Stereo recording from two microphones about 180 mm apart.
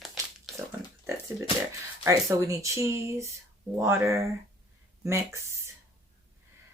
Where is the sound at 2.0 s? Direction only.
15° right (ahead or behind).